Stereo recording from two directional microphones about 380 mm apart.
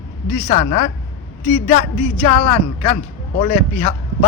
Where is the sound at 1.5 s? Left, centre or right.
Centre.